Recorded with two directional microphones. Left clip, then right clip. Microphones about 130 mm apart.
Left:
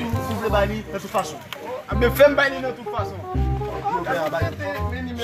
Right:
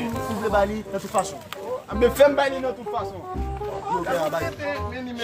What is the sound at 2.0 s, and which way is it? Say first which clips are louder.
Speech: left 2 dB; 35° right (ahead or behind).